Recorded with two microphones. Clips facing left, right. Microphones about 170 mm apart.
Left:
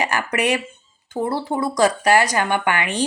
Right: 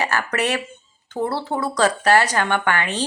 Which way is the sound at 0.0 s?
15° left (ahead or behind).